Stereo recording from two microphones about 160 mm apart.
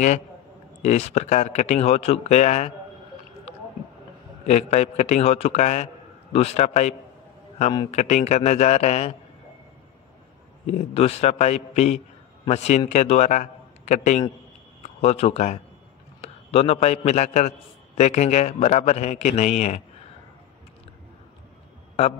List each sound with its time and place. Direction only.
0.8 s a man's voice: 45° left (ahead or behind)
4.5 s a man's voice: 45° left (ahead or behind)
10.7 s a man's voice: 40° left (ahead or behind)